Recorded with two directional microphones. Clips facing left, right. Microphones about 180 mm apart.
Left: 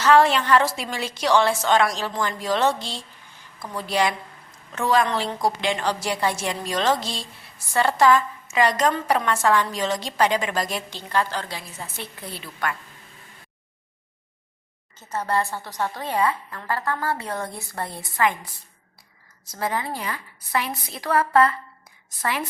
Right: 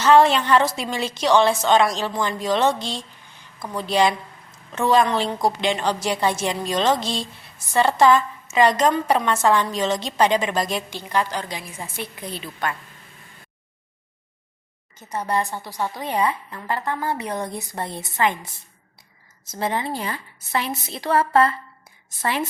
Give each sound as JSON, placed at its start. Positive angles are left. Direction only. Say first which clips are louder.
{"t": 0.0, "sound": "a woman's voice", "louder": "right 2 dB", "side_deg": -20}
{"t": 14.9, "sound": "a woman's voice", "louder": "right 1 dB", "side_deg": -15}